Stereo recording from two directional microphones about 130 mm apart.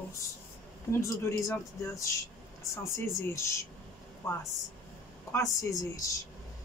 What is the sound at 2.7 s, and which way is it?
Speech, 20° left (ahead or behind).